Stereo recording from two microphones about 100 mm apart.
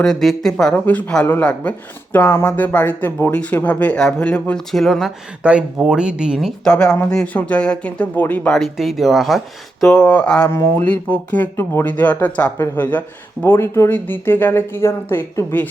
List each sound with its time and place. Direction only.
0.0 s speech: 5° left (ahead or behind)
5.4 s speech: 10° right (ahead or behind)
6.7 s speech: 10° left (ahead or behind)
8.4 s speech: centre (ahead or behind)
9.8 s speech: 10° left (ahead or behind)
10.5 s speech: 25° left (ahead or behind)